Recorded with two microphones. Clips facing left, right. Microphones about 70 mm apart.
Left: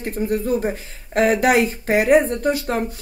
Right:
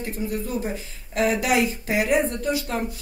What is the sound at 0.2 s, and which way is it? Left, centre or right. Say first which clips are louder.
A woman's voice: left 8 dB; left.